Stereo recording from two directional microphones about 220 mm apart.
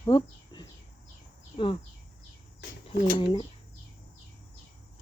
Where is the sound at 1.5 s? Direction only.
25° left (ahead or behind).